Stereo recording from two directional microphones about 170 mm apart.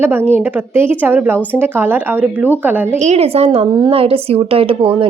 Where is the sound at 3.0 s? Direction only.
40° right (ahead or behind).